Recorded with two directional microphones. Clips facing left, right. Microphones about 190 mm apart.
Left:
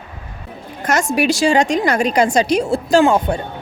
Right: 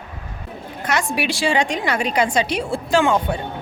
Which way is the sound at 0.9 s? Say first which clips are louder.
Left 6 dB; 45° left (ahead or behind).